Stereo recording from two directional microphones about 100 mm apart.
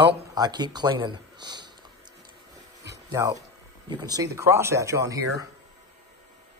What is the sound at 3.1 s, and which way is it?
Speech, 35° right (ahead or behind).